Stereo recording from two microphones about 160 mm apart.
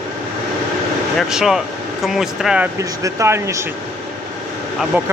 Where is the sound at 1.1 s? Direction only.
5° right (ahead or behind).